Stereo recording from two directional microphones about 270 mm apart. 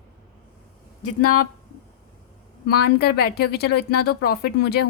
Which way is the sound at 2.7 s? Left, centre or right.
Left.